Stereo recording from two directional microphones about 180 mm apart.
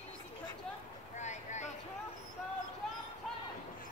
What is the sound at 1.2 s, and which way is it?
Vehicle, 40° left (ahead or behind).